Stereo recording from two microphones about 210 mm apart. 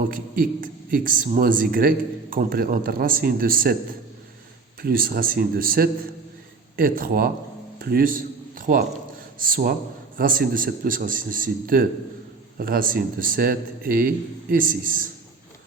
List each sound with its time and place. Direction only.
0.1 s a man's voice: 40° right (ahead or behind)
4.8 s a man's voice: 45° right (ahead or behind)